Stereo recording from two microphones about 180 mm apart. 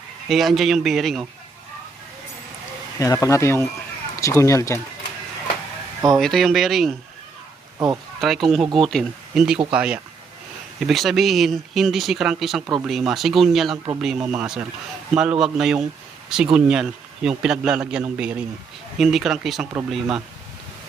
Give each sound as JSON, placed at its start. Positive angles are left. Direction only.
{"t": 0.3, "sound": "speech", "side_deg": 0}
{"t": 3.0, "sound": "speech", "side_deg": 15}
{"t": 6.1, "sound": "speech", "side_deg": 0}
{"t": 8.2, "sound": "speech", "side_deg": 0}